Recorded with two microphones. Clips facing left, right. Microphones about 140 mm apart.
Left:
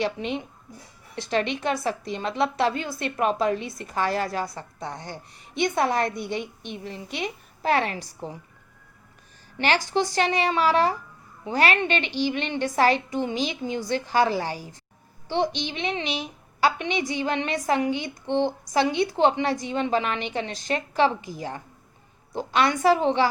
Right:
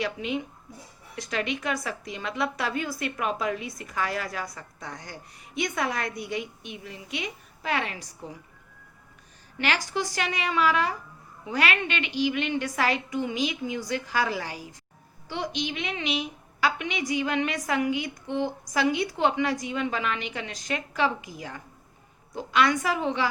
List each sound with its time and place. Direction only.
0.0 s a woman's voice: 30° left (ahead or behind)
9.6 s a woman's voice: 30° left (ahead or behind)